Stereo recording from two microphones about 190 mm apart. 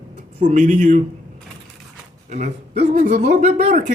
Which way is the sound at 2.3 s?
35° right (ahead or behind).